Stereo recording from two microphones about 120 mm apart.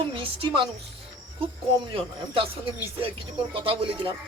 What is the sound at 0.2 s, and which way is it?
Speech, 45° right (ahead or behind).